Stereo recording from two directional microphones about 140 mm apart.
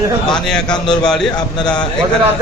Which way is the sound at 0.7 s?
35° left (ahead or behind).